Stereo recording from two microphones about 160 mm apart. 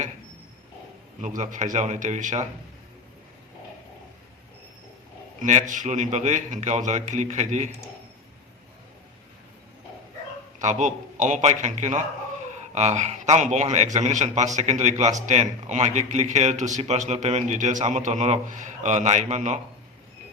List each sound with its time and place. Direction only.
1.2 s a man's voice: 50° right (ahead or behind)
5.4 s a man's voice: 50° right (ahead or behind)
10.6 s a man's voice: 50° right (ahead or behind)